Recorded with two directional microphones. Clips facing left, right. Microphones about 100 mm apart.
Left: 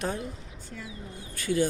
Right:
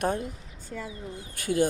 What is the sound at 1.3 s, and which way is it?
Speech, 50° right (ahead or behind).